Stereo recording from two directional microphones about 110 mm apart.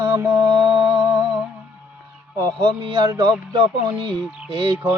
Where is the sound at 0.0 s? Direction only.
25° right (ahead or behind).